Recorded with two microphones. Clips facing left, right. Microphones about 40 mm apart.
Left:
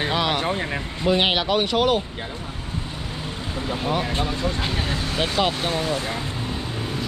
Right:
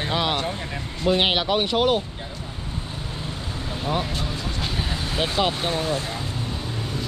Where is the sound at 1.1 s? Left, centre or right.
Centre.